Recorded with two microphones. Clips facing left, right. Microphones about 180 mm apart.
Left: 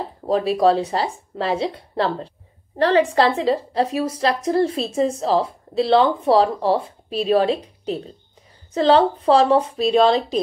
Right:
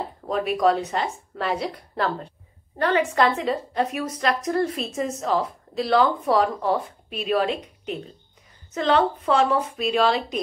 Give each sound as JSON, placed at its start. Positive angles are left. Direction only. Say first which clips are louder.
{"t": 0.3, "sound": "a woman's voice", "louder": "left 4 dB", "side_deg": 30}